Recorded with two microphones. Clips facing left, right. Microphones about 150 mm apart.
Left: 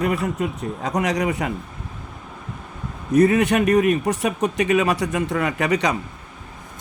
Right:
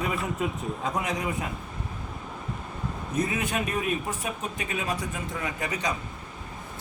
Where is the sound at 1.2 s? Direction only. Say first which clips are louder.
Left 8 dB; 75° left (ahead or behind).